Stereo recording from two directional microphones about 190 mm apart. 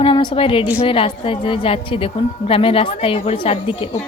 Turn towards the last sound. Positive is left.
turn(degrees=30)  # may be behind; listen again after turning